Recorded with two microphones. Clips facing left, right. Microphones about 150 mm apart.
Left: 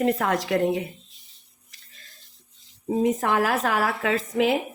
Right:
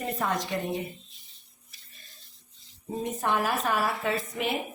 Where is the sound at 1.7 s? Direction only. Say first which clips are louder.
Left 3 dB; 90° left.